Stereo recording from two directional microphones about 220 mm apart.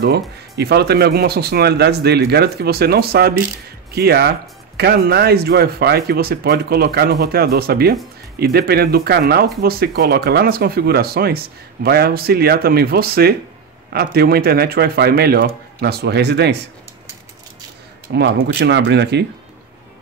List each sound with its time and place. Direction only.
0.0 s speech: 50° right (ahead or behind)
18.1 s speech: 50° right (ahead or behind)